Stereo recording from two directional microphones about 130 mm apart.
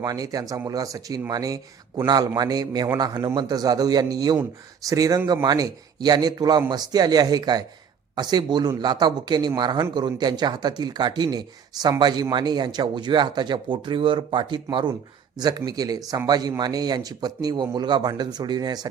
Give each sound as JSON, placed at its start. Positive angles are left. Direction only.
{"t": 0.0, "sound": "a man's voice", "side_deg": -30}